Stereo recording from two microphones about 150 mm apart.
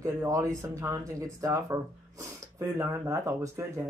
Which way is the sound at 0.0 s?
20° right (ahead or behind).